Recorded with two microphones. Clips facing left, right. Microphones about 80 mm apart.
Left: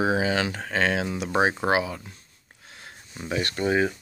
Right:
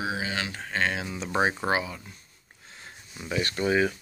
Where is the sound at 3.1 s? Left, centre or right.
Left.